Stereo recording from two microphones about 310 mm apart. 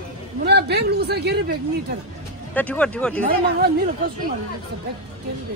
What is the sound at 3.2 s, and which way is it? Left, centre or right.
Speech, right.